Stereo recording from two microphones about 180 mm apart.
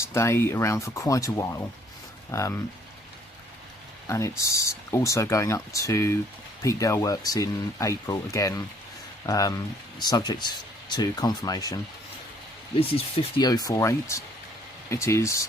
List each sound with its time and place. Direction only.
0.0 s speech: 15° left (ahead or behind)
4.0 s speech: 15° left (ahead or behind)
13.1 s speech: 20° left (ahead or behind)